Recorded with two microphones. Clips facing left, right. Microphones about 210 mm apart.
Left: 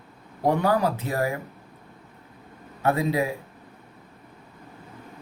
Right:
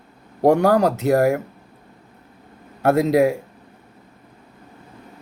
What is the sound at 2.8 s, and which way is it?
Speech, 80° right.